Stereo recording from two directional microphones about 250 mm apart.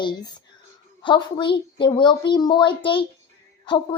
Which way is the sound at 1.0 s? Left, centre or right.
Centre.